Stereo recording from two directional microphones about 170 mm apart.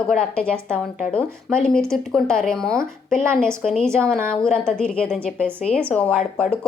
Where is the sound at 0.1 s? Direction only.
5° left (ahead or behind).